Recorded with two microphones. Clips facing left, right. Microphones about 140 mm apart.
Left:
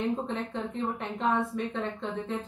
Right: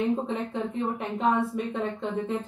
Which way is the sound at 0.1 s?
5° right (ahead or behind).